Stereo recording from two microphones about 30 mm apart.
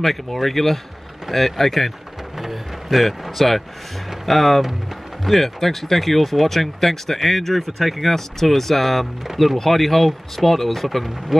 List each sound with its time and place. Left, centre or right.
0.0 s speech: centre
2.3 s speech: centre